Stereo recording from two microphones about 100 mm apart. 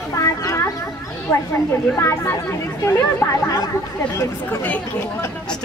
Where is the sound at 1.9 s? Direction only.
25° left (ahead or behind).